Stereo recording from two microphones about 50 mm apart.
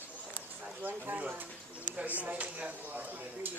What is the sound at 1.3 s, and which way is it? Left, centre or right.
Bird, right.